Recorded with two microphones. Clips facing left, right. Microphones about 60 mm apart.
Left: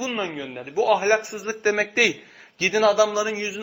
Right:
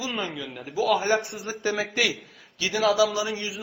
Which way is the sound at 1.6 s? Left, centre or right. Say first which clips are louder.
Left 5 dB; left.